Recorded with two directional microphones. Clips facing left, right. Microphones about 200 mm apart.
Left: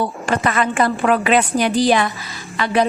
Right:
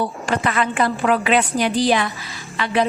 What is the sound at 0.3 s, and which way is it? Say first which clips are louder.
A woman's voice: left 2 dB; 50° left (ahead or behind).